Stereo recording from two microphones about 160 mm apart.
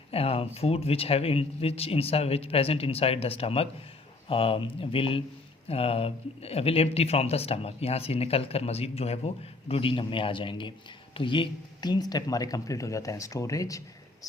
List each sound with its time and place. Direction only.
0.1 s speech: 40° left (ahead or behind); by 13.8 s 20° left (ahead or behind)